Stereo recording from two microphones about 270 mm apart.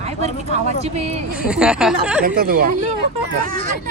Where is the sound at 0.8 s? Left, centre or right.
Right.